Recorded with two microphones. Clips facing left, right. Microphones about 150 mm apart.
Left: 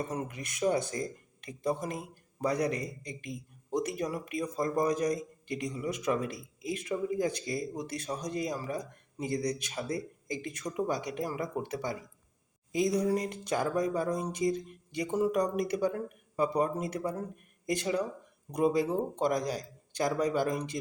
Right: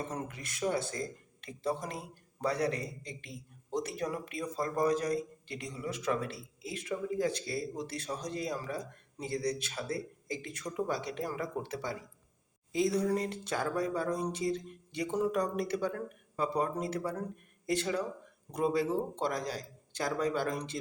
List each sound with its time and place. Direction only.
0.0 s a man's voice: 10° left (ahead or behind)